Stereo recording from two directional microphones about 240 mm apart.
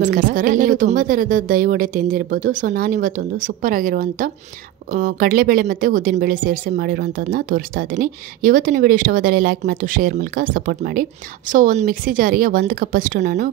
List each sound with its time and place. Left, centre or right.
0.0 s speech: right